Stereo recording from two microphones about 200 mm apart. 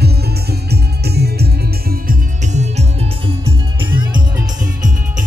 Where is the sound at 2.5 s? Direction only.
35° right (ahead or behind).